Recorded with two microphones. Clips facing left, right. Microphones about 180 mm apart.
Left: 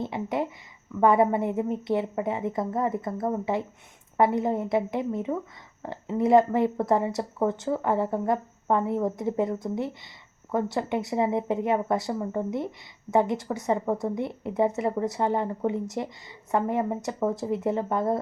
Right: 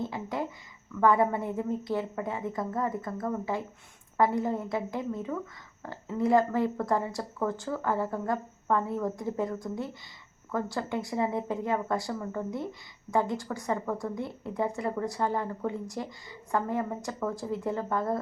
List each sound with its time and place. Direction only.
0.0 s a woman's voice: 20° left (ahead or behind)